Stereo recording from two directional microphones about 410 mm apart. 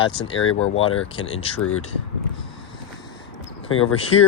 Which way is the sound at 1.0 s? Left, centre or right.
Centre.